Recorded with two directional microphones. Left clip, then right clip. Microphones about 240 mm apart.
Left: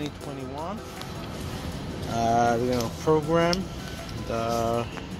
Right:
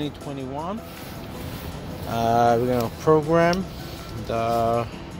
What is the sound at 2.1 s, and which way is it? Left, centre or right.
Speech, right.